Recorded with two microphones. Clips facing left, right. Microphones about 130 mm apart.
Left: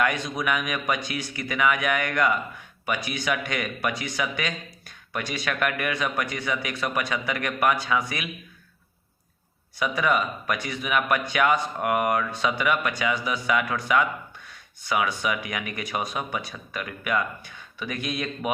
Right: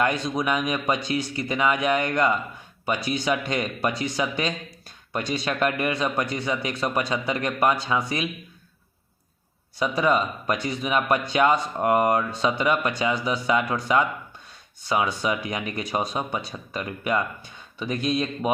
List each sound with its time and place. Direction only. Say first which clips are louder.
0.0 s speech: right 2 dB; 30° right (ahead or behind)
9.7 s speech: right 2 dB; 30° right (ahead or behind)